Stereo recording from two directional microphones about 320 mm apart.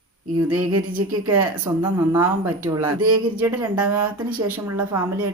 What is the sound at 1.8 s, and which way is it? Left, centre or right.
A woman's voice, centre.